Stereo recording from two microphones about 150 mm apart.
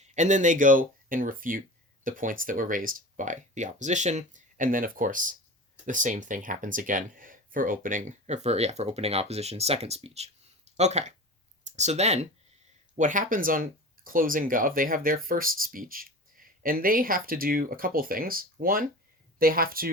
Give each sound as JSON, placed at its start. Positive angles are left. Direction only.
{"t": 0.0, "sound": "speech", "side_deg": -55}
{"t": 13.0, "sound": "speech", "side_deg": -60}